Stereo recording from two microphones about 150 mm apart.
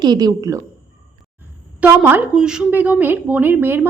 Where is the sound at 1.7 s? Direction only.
10° right (ahead or behind).